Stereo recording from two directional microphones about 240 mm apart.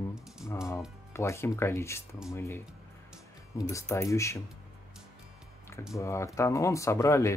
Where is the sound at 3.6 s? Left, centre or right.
Centre.